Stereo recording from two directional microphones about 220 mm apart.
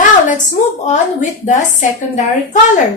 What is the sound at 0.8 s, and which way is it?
A woman's voice, 35° left (ahead or behind).